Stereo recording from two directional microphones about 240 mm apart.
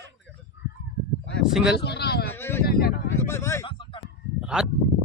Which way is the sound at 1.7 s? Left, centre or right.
Left.